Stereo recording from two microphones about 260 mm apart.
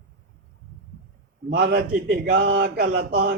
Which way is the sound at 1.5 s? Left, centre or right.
Right.